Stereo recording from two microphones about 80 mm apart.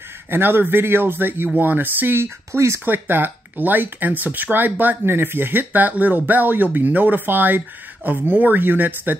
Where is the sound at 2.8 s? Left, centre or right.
Right.